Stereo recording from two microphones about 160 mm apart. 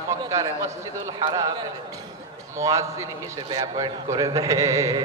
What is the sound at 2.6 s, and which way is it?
Speech, 20° right (ahead or behind).